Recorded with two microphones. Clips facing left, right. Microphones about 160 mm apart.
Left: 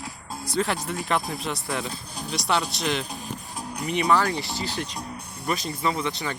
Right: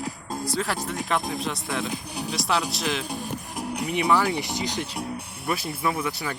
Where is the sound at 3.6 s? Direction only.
75° right (ahead or behind).